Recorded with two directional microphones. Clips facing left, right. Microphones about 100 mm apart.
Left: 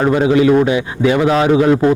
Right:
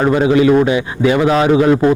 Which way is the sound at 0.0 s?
20° right (ahead or behind).